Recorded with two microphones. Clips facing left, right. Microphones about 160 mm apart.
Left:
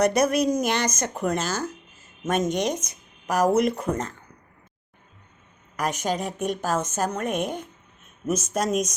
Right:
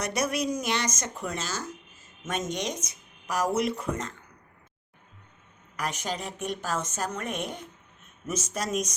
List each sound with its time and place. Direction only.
0.0 s speech: 50° left (ahead or behind)
5.7 s speech: 45° left (ahead or behind)